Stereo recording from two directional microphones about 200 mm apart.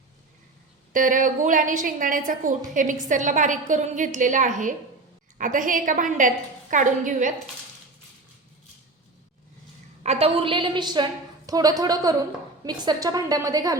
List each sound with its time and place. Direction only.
0.9 s a woman's voice: 40° right (ahead or behind)
10.0 s a woman's voice: 30° right (ahead or behind)